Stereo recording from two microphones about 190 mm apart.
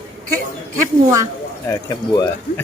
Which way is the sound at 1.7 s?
15° left (ahead or behind).